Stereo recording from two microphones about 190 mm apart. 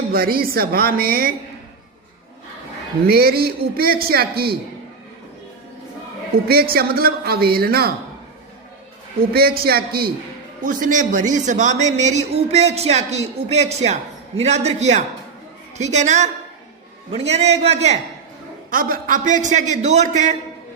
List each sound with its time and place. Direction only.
0.1 s speech: 50° right (ahead or behind)
3.1 s speech: 50° right (ahead or behind)
6.5 s speech: 55° right (ahead or behind)
9.3 s a man's voice: 55° right (ahead or behind); by 18.0 s 35° right (ahead or behind)
18.7 s a man's voice: 50° right (ahead or behind)